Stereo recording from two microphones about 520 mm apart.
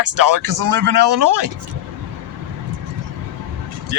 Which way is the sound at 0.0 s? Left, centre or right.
Right.